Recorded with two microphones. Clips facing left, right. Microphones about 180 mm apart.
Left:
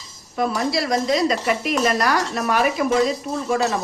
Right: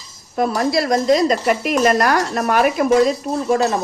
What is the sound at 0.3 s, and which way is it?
Speech, 50° right (ahead or behind).